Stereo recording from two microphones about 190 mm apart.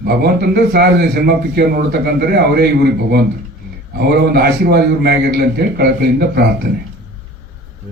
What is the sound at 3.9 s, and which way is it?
A man's voice, 55° right (ahead or behind).